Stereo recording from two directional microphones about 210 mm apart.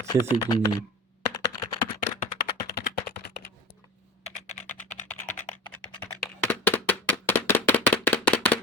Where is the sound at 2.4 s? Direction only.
20° left (ahead or behind).